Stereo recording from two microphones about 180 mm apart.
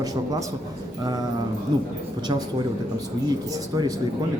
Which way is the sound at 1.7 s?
25° right (ahead or behind).